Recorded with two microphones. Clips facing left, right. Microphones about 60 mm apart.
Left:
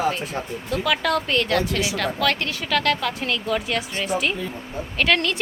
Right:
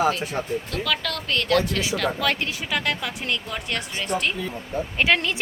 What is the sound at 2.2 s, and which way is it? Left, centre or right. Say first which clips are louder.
Speech: left 2 dB; centre.